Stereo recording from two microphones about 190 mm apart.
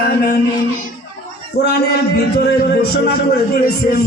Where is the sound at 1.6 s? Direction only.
60° left (ahead or behind).